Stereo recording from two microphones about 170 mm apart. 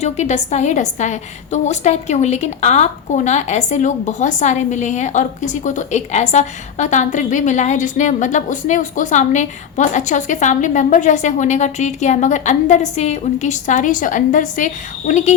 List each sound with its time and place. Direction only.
0.0 s a woman's voice: 40° left (ahead or behind)